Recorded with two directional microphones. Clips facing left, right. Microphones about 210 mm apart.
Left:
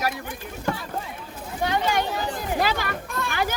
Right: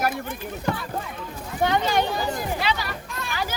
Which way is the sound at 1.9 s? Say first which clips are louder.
Right 2 dB; 35° right (ahead or behind).